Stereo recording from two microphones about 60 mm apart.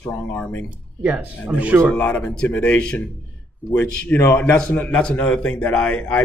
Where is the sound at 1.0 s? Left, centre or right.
Right.